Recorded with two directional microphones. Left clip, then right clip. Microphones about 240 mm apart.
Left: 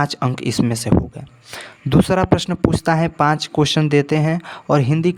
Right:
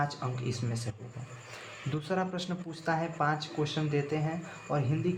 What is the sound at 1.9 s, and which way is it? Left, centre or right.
Speech, left.